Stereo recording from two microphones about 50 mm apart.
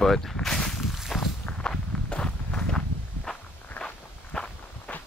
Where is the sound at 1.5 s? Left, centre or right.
Centre.